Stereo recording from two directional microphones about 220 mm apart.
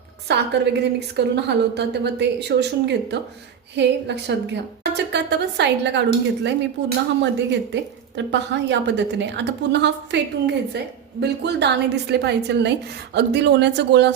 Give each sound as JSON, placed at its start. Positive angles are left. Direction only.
{"t": 0.3, "sound": "a woman's voice", "side_deg": -50}